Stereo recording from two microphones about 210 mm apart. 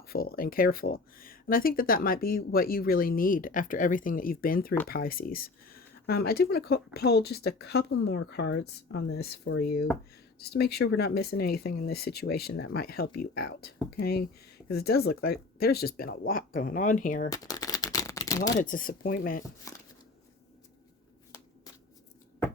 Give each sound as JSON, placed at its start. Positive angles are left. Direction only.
{"t": 0.0, "sound": "speech", "side_deg": 45}
{"t": 17.3, "sound": "shuffling cards", "side_deg": 15}
{"t": 18.6, "sound": "speech", "side_deg": 40}